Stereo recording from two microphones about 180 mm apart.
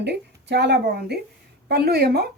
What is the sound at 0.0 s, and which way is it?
A woman's voice, 70° right (ahead or behind).